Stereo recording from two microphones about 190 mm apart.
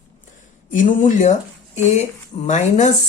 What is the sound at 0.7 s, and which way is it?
Speech, 40° left (ahead or behind).